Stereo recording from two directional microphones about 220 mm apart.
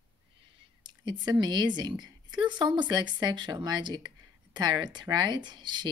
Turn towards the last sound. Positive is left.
turn(degrees=-20)  # may be behind; listen again after turning